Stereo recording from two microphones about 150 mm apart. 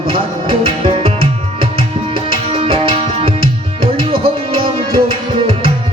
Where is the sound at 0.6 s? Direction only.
35° right (ahead or behind).